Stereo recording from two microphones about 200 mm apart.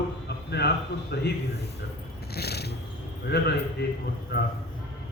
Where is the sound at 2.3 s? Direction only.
55° left (ahead or behind).